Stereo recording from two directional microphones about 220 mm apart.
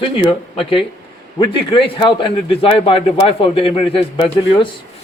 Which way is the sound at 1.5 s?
25° left (ahead or behind).